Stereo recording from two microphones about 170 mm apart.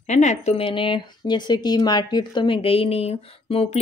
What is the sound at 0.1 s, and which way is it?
Speech, 45° left (ahead or behind).